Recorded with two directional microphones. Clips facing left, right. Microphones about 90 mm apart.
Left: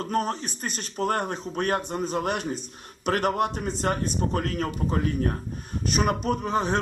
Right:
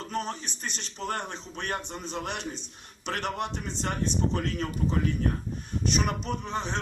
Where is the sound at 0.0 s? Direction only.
45° left (ahead or behind).